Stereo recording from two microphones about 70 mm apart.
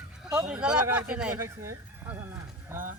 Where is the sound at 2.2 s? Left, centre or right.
Right.